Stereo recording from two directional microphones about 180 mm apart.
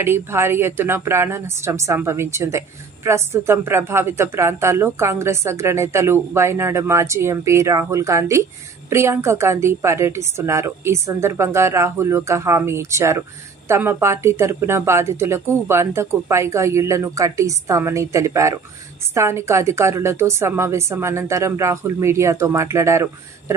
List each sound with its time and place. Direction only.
0.0 s speech: 15° right (ahead or behind)